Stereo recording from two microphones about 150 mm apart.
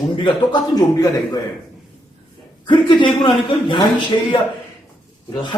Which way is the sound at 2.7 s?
30° left (ahead or behind).